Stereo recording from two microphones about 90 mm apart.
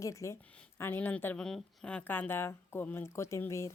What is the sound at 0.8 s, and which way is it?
Speech, 25° left (ahead or behind).